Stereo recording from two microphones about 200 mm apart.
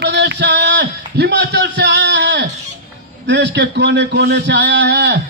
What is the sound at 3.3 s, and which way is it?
A man's voice, 60° right (ahead or behind).